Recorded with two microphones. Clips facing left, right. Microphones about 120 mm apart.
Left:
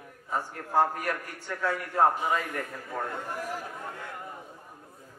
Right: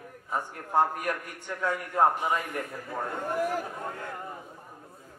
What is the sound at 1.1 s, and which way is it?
A man's voice, 20° right (ahead or behind).